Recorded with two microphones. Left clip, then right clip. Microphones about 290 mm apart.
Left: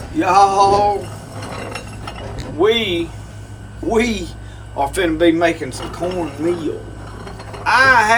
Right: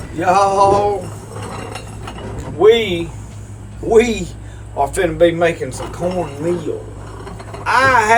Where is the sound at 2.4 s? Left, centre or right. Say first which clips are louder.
Right 4 dB; centre.